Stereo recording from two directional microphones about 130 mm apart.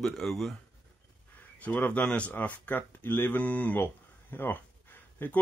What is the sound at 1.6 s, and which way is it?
Speech, 10° left (ahead or behind).